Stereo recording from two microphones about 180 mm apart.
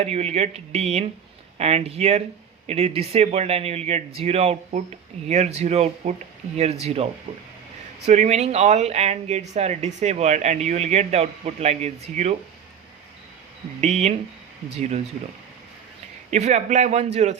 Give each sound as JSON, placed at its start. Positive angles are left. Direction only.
{"t": 0.0, "sound": "speech", "side_deg": -35}
{"t": 13.8, "sound": "speech", "side_deg": -40}
{"t": 16.3, "sound": "speech", "side_deg": -40}